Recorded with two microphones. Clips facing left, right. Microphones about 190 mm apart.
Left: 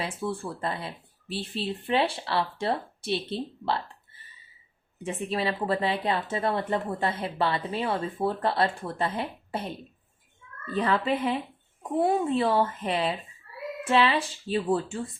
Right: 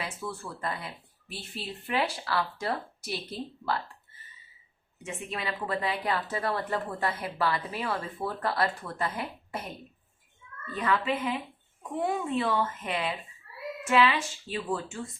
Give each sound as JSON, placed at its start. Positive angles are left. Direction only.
{"t": 0.0, "sound": "a woman's voice", "side_deg": 30}
{"t": 5.0, "sound": "a woman's voice", "side_deg": 30}
{"t": 10.8, "sound": "speech", "side_deg": 35}